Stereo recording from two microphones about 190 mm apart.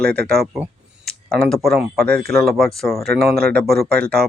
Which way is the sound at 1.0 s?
Centre (ahead or behind).